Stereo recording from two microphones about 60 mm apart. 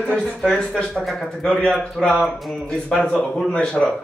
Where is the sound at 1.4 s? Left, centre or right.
Centre.